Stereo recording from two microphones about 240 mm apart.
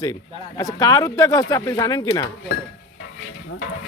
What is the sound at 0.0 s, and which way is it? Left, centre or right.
Speech, centre.